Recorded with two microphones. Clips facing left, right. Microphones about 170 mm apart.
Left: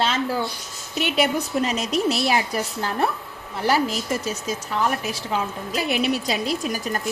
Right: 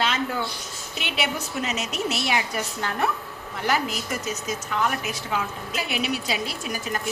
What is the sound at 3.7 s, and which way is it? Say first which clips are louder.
A woman's voice: left 4 dB; 35° left (ahead or behind).